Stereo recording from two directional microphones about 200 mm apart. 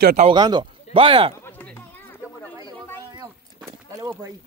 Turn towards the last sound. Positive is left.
turn(degrees=-15)  # may be behind; listen again after turning